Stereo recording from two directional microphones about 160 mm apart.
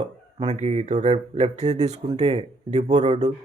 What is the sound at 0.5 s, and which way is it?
Speech, 45° right (ahead or behind).